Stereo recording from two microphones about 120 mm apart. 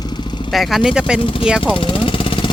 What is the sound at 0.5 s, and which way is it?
Speech, centre (ahead or behind).